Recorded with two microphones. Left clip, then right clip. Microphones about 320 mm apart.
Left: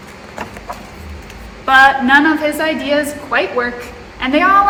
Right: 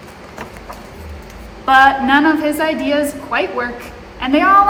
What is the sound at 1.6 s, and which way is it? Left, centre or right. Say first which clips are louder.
A woman's voice: left 1 dB; centre.